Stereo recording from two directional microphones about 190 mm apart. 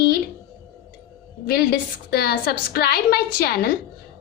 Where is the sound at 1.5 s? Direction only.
55° left (ahead or behind).